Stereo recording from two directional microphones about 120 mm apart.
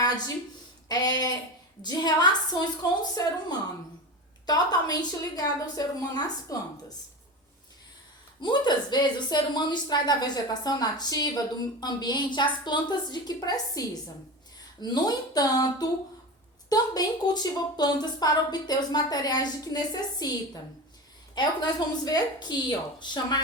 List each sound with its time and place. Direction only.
0.9 s a sound: 30° left (ahead or behind)
1.8 s speech: 35° left (ahead or behind)
8.4 s speech: 40° left (ahead or behind)